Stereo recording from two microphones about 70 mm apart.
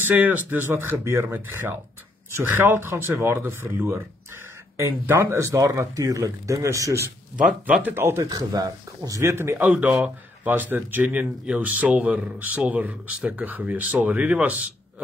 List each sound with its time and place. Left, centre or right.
0.0 s speech: right
7.8 s speech: right
8.5 s speech: right
9.2 s speech: right
9.6 s speech: centre